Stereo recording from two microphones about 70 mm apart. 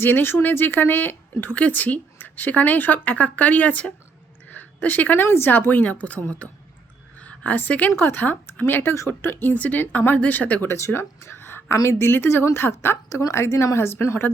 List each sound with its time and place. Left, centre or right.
0.0 s speech: left
4.5 s a sound: left
5.2 s speech: left
5.5 s a woman's voice: left
7.9 s speech: left
10.7 s speech: left
13.1 s speech: left